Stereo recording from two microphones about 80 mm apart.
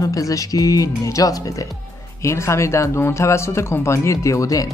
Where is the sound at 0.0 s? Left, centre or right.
Left.